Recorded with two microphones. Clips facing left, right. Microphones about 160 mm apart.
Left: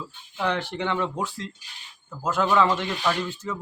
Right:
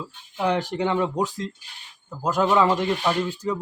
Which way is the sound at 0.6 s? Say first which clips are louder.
Right 4 dB; 40° right (ahead or behind).